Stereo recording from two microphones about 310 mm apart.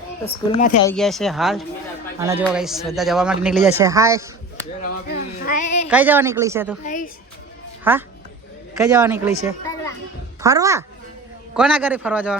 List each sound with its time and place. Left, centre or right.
0.5 s a woman's voice: left
0.9 s a man's voice: centre
5.0 s child singing: left
5.9 s speech: centre
6.8 s a woman's voice: left
7.9 s speech: centre